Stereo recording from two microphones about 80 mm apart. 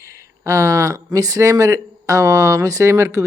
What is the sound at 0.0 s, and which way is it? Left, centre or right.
Speech, right.